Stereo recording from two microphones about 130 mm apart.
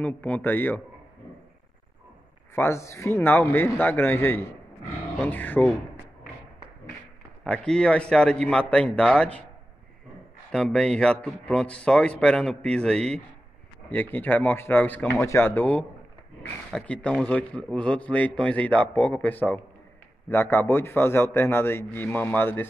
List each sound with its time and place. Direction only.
0.0 s a man's voice: 15° left (ahead or behind)
2.5 s a man's voice: 20° left (ahead or behind)
7.4 s a man's voice: 5° left (ahead or behind)
10.5 s a man's voice: 5° left (ahead or behind)